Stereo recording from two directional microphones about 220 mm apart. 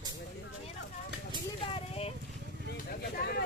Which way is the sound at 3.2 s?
45° left (ahead or behind).